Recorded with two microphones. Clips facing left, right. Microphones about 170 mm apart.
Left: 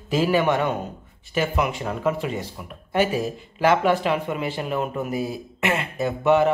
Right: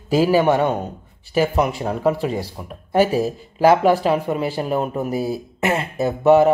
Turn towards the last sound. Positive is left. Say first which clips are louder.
# right 5 dB
turn(degrees=-40)  # may be behind; listen again after turning